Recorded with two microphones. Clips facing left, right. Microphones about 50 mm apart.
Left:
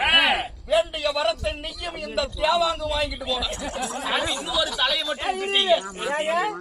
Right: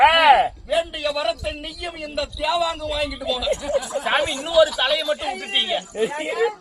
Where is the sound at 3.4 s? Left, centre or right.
Right.